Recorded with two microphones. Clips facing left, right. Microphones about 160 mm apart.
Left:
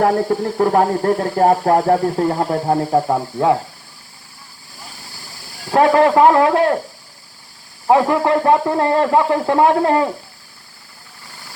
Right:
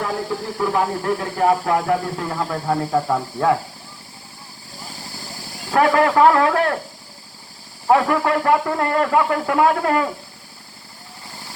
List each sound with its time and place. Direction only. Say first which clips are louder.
0.0 s speech: left 9 dB; 55° left (ahead or behind); by 3.6 s 25° left (ahead or behind)
5.7 s a man's voice: left 3 dB; 25° left (ahead or behind)
7.9 s a man's voice: left 3 dB; 20° left (ahead or behind)